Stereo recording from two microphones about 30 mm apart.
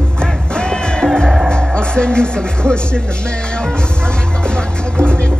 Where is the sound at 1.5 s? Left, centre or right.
Left.